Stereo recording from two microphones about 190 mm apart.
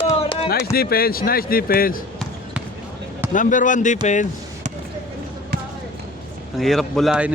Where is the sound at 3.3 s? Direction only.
45° left (ahead or behind).